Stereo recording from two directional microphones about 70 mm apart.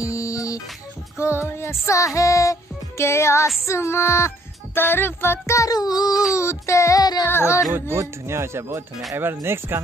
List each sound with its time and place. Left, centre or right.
0.0 s music: left
1.1 s music: left
3.6 s a sound: left
5.7 s child singing: left
6.3 s child singing: left
7.0 s music: left
7.2 s a sound: left
7.9 s speech: right